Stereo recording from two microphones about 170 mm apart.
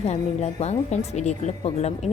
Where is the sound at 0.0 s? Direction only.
40° left (ahead or behind).